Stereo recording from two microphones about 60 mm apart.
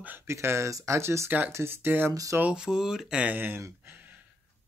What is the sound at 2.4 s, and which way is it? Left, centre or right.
Speech, centre.